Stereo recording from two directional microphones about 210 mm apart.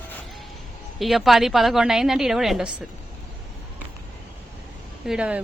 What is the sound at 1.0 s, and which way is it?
A woman's voice, centre (ahead or behind).